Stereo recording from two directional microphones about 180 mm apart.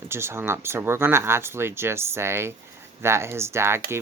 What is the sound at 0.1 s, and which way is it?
Speech, 15° right (ahead or behind).